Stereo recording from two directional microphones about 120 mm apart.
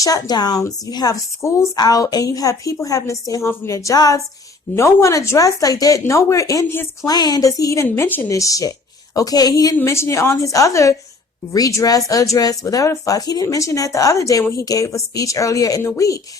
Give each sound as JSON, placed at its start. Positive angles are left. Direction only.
{"t": 0.0, "sound": "a woman's voice", "side_deg": 35}
{"t": 7.1, "sound": "speech", "side_deg": 35}
{"t": 8.4, "sound": "a woman's voice", "side_deg": 30}